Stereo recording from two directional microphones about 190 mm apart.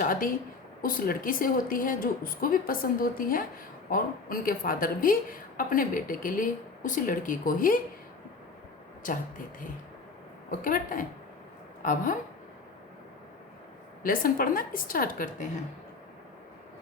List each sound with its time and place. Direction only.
0.0 s a woman's voice: 45° left (ahead or behind)
10.6 s a woman's voice: 45° left (ahead or behind)
14.0 s a woman's voice: 50° left (ahead or behind)